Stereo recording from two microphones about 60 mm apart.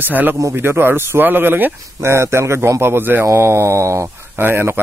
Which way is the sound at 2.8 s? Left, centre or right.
Right.